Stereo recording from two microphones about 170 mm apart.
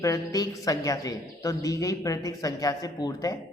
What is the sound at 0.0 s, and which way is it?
A man's voice, 20° left (ahead or behind).